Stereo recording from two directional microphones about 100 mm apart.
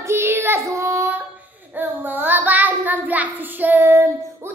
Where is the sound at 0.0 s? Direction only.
25° right (ahead or behind).